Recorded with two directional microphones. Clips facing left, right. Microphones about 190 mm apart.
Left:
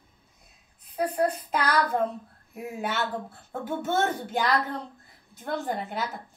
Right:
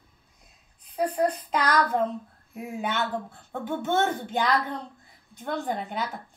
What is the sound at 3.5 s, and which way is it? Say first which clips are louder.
A woman's voice: right 1 dB; 5° left (ahead or behind).